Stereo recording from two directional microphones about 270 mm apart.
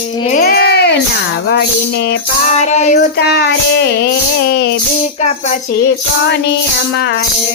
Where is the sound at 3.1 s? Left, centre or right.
Left.